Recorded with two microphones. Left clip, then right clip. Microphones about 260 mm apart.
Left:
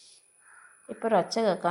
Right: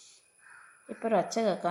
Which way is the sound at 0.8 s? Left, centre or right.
Centre.